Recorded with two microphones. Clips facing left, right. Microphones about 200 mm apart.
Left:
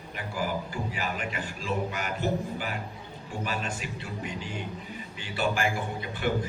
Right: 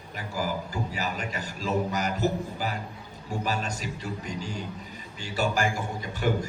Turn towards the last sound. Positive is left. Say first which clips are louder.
# right 1 dB
turn(degrees=-40)  # may be behind; listen again after turning